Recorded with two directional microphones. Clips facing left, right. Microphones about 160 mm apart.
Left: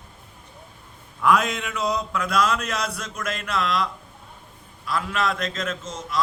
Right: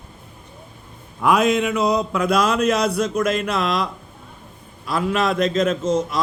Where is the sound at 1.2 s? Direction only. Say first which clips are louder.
Right 4 dB; 10° right (ahead or behind).